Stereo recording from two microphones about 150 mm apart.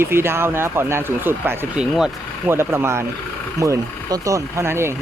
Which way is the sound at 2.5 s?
15° right (ahead or behind).